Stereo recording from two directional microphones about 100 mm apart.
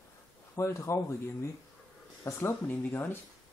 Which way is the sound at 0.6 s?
30° left (ahead or behind).